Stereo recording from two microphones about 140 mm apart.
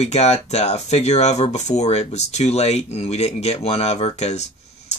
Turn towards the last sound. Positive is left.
turn(degrees=50)  # may be behind; listen again after turning